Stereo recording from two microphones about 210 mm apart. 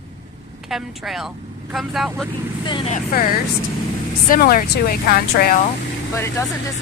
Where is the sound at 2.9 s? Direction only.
40° left (ahead or behind).